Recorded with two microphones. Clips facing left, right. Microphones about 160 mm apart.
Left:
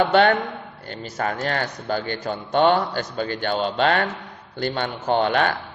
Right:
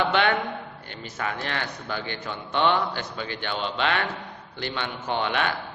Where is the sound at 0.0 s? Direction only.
45° left (ahead or behind).